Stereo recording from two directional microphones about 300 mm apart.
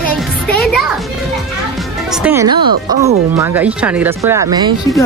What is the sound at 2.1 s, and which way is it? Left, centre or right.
Speech, centre.